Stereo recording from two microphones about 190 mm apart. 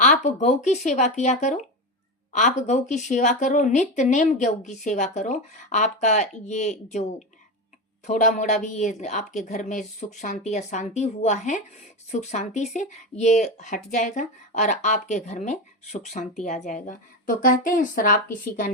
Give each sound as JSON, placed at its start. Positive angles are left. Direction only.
{"t": 0.0, "sound": "speech", "side_deg": 40}
{"t": 8.0, "sound": "a woman's voice", "side_deg": 40}